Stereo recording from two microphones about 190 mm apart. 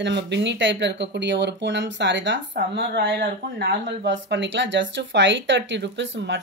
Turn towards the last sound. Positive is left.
turn(degrees=-70)  # may be behind; listen again after turning